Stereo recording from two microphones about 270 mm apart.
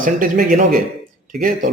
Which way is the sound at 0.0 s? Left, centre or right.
Right.